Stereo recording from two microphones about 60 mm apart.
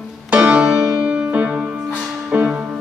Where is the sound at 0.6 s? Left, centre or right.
Centre.